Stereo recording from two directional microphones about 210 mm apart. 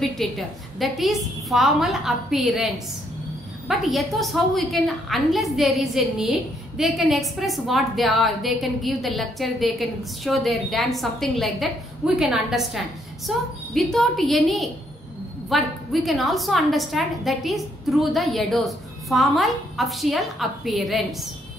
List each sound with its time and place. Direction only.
0.2 s a woman's voice: centre (ahead or behind)